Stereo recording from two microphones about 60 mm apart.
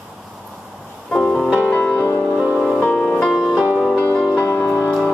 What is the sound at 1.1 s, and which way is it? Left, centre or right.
Music, centre.